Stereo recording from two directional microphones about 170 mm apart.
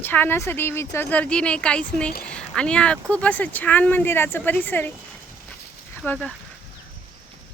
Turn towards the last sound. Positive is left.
turn(degrees=5)  # may be behind; listen again after turning